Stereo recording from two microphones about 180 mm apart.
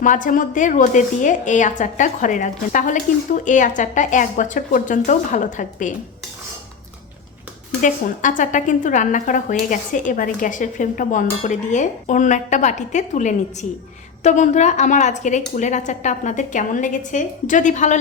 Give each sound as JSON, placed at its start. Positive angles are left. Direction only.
{"t": 0.0, "sound": "a woman's voice", "side_deg": 45}
{"t": 7.8, "sound": "a woman's voice", "side_deg": 45}